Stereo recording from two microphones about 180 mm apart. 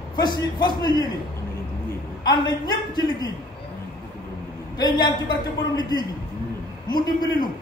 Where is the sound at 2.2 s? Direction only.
25° left (ahead or behind).